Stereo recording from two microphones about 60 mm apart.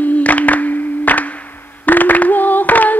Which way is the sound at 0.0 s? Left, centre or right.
Left.